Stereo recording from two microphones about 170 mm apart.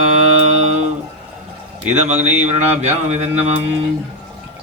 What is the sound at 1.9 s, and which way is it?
Mantra, 45° right (ahead or behind).